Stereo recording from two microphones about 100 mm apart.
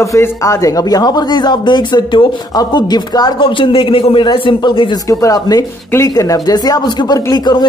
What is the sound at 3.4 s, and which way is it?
A man's voice, 60° left (ahead or behind).